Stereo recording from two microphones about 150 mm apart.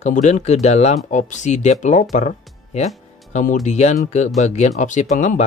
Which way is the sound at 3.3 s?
60° left (ahead or behind).